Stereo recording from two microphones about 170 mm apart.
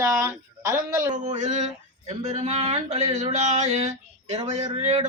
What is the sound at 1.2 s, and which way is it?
Speech, 45° right (ahead or behind).